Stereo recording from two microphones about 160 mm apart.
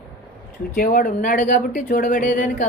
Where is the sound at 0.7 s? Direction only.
65° left (ahead or behind).